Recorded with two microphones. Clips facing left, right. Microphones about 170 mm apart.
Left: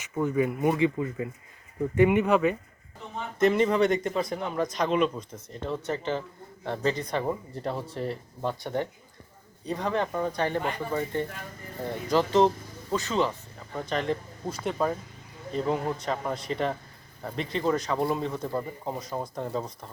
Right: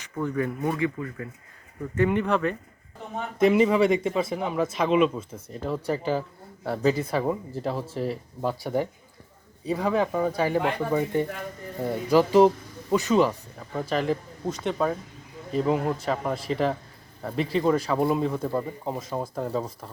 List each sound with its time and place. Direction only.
0.2 s speech: 15° left (ahead or behind)
3.4 s speech: 5° right (ahead or behind)